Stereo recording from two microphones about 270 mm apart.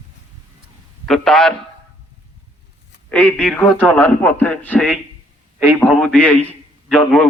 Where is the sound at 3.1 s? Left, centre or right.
Centre.